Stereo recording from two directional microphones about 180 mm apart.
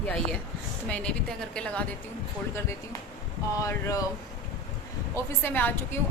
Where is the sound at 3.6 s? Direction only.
20° left (ahead or behind).